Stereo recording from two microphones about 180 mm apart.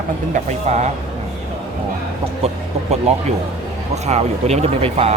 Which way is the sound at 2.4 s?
35° right (ahead or behind).